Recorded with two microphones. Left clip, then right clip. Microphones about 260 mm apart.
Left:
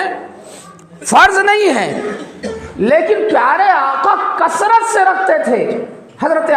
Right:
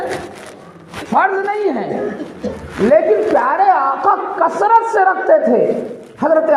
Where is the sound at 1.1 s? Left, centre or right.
Left.